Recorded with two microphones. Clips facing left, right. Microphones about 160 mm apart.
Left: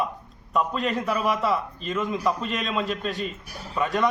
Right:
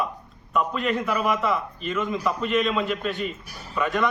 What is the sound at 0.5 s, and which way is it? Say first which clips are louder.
A man's voice: right 1 dB; 35° left (ahead or behind).